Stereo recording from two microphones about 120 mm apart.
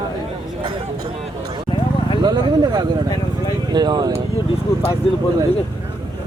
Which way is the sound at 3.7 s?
40° right (ahead or behind).